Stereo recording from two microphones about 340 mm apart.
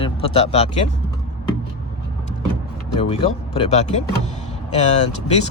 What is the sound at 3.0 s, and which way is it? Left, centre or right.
Speech, centre.